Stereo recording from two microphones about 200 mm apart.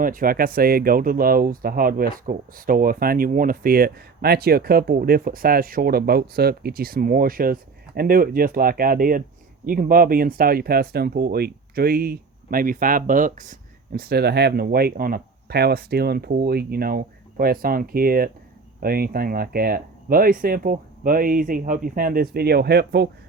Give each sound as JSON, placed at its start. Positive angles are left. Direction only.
{"t": 0.0, "sound": "speech", "side_deg": -45}